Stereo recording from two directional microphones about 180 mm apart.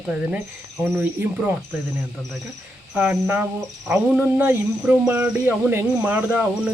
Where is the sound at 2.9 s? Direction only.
10° right (ahead or behind).